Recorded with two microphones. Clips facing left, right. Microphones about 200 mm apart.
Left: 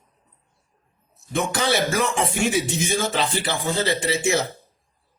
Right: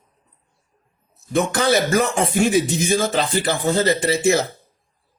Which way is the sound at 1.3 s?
45° right (ahead or behind).